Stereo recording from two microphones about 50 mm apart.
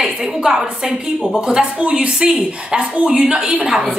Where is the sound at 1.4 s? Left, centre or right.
Centre.